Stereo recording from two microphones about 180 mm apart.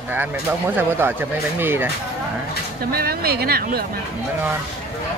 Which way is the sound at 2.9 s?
55° right (ahead or behind).